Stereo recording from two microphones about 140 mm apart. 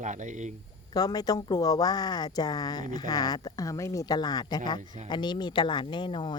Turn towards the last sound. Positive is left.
turn(degrees=30)  # may be behind; listen again after turning